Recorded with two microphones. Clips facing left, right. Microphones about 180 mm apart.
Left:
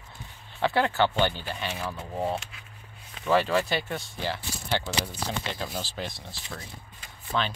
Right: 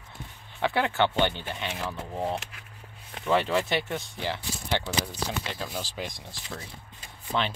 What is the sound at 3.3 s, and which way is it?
Speech, 20° right (ahead or behind).